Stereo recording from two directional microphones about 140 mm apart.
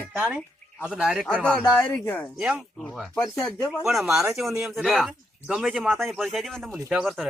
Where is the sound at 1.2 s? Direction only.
10° left (ahead or behind).